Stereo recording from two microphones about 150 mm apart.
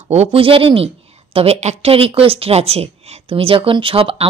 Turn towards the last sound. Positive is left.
turn(degrees=-40)  # may be behind; listen again after turning